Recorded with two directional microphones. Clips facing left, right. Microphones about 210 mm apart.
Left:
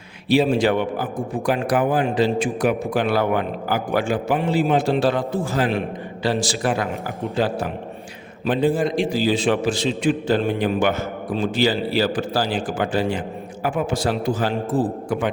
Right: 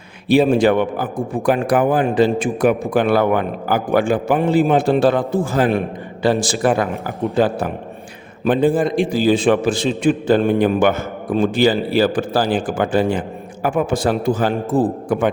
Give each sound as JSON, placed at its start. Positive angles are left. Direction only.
{"t": 0.3, "sound": "a man's voice", "side_deg": -50}